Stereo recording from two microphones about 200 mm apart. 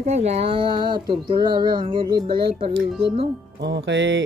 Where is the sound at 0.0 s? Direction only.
35° right (ahead or behind).